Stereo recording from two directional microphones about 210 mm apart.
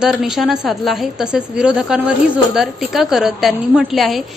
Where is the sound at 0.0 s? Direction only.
Centre (ahead or behind).